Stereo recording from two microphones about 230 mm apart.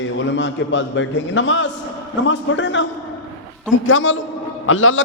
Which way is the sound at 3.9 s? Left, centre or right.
Left.